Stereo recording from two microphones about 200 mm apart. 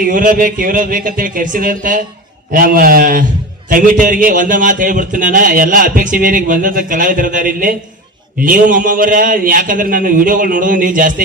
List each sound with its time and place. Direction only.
0.0 s speech: 45° right (ahead or behind)